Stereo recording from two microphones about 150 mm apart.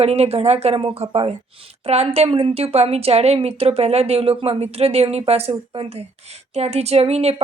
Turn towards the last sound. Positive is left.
turn(degrees=-45)  # may be behind; listen again after turning